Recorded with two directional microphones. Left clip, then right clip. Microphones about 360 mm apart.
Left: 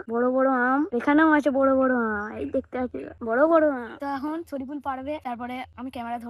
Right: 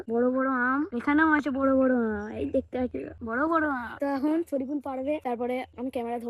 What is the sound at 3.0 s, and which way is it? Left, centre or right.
Speech, left.